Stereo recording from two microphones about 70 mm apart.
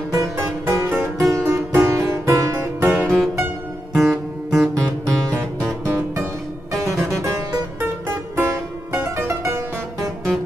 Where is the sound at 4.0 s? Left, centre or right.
Centre.